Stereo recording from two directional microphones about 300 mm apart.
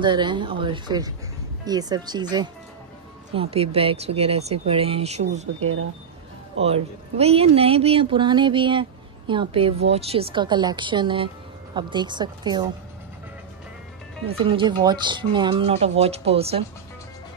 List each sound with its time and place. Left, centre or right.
0.0 s a woman's voice: centre
14.2 s a woman's voice: centre